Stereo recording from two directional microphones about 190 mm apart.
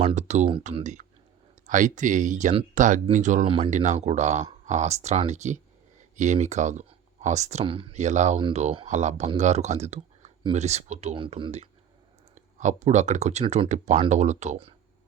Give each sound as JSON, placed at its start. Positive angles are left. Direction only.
{"t": 0.0, "sound": "speech", "side_deg": -35}